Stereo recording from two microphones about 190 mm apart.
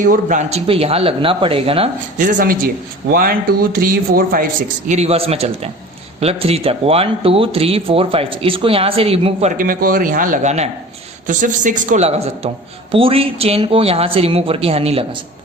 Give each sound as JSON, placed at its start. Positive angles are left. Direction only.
{"t": 0.0, "sound": "speech", "side_deg": -45}
{"t": 2.1, "sound": "speech", "side_deg": -45}
{"t": 4.9, "sound": "speech", "side_deg": -35}
{"t": 9.6, "sound": "speech", "side_deg": -50}